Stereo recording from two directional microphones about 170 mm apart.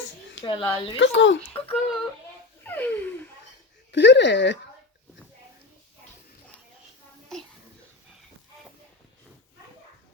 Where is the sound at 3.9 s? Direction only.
90° left.